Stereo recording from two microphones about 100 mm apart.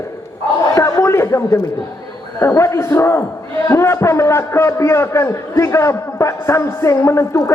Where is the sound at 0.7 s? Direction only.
30° left (ahead or behind).